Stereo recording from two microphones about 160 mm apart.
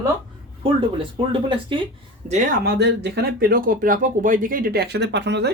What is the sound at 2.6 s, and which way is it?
Speech, 90° right.